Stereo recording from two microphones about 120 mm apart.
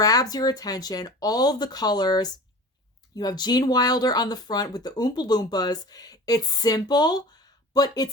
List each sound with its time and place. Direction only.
0.0 s speech: 30° left (ahead or behind)